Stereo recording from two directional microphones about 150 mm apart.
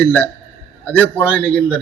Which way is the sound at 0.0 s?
10° left (ahead or behind).